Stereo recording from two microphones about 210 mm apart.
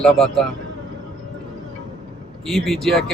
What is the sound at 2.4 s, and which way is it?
Speech, centre (ahead or behind).